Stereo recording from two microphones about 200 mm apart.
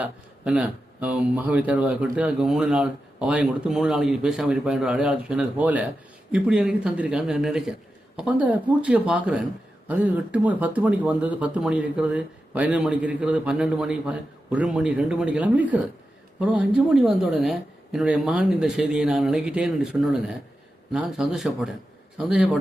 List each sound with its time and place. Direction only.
0.0 s speech: 5° right (ahead or behind)